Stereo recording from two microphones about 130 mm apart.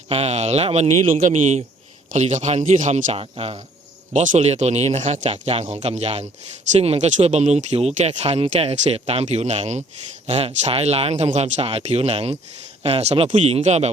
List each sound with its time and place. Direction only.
0.1 s speech: 55° right (ahead or behind)
4.1 s speech: 70° right (ahead or behind); by 13.6 s 45° right (ahead or behind)
13.6 s speech: 55° right (ahead or behind)